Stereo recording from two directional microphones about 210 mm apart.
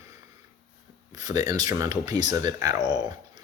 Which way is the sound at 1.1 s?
15° right (ahead or behind).